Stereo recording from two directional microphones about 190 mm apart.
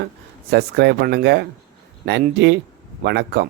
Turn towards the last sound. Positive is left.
turn(degrees=-65)  # may be behind; listen again after turning